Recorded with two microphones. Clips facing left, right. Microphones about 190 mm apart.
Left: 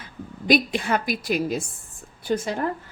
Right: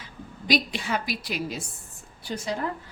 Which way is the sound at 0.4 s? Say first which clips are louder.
Left 5 dB; 50° left (ahead or behind).